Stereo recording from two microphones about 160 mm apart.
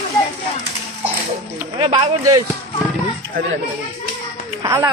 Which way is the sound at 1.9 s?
25° right (ahead or behind).